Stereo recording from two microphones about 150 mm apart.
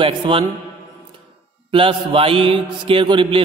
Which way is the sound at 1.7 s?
35° right (ahead or behind).